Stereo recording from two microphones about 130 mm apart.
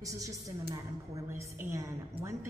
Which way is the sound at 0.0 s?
25° right (ahead or behind).